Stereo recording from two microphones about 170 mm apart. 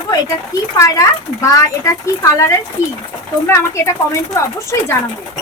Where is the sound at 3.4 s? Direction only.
15° left (ahead or behind).